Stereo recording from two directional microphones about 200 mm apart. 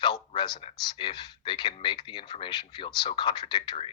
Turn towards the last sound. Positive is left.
turn(degrees=25)  # may be behind; listen again after turning